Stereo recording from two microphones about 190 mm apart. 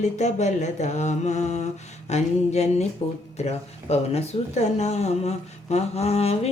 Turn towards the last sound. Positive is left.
turn(degrees=30)  # may be behind; listen again after turning